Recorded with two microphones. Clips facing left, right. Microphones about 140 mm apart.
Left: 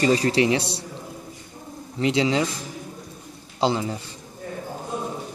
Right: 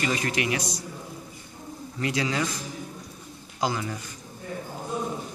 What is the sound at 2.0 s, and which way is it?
Speech, 25° left (ahead or behind).